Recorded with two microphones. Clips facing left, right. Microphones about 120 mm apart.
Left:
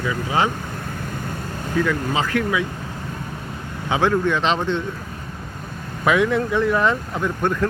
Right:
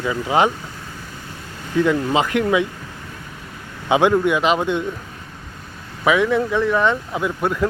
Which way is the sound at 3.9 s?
15° right (ahead or behind).